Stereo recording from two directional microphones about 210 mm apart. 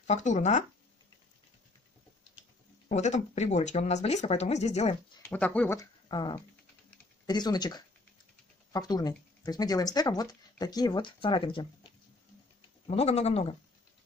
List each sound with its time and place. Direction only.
0.0 s speech: 35° left (ahead or behind)
2.9 s speech: 35° left (ahead or behind)
5.3 s speech: 5° left (ahead or behind); by 11.6 s 25° left (ahead or behind)
12.8 s speech: 30° left (ahead or behind)